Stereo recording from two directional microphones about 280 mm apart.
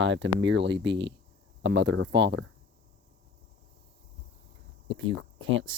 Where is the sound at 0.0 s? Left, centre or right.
Right.